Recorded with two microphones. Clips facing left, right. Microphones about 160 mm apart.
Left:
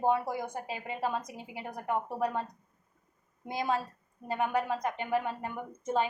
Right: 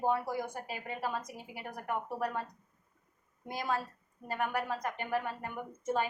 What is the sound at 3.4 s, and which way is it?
Speech, 20° left (ahead or behind).